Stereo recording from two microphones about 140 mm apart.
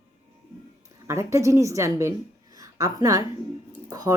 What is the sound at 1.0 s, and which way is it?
A woman's voice, 20° right (ahead or behind).